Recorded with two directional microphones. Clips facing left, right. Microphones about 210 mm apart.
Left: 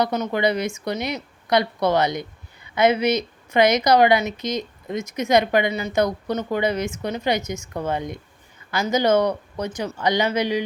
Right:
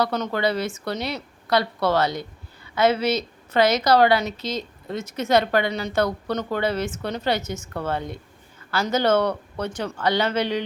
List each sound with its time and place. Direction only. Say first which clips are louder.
0.0 s a woman's voice: left 2 dB; 15° left (ahead or behind)